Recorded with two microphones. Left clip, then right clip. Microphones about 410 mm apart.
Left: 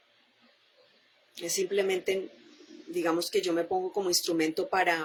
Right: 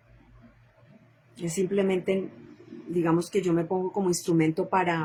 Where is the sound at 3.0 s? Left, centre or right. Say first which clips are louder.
Right 2 dB; centre.